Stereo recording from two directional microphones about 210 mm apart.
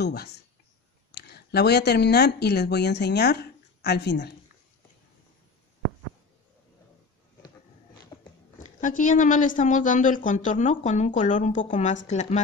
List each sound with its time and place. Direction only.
0.0 s speech: 50° left (ahead or behind)
8.5 s a woman's voice: 40° left (ahead or behind)